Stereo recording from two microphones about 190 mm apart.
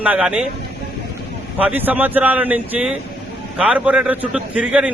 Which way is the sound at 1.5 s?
10° right (ahead or behind).